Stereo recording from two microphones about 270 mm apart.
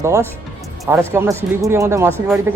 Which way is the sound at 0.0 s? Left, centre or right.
Centre.